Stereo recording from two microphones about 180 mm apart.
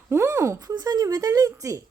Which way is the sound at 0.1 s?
15° right (ahead or behind).